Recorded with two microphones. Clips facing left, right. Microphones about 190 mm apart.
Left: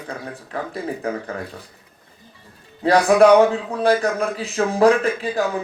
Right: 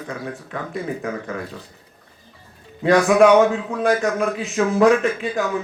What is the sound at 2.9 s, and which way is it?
Speech, 35° left (ahead or behind).